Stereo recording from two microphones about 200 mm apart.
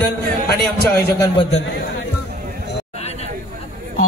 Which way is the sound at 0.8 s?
50° left (ahead or behind).